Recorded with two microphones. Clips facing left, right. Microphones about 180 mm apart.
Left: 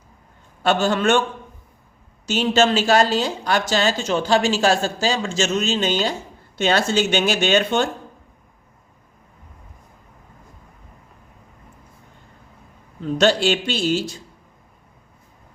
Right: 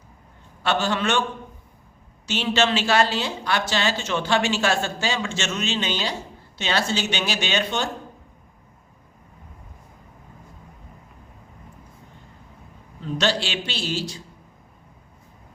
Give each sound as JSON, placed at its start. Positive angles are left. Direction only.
{"t": 0.6, "sound": "speech", "side_deg": 45}
{"t": 2.2, "sound": "speech", "side_deg": 45}
{"t": 13.1, "sound": "speech", "side_deg": 50}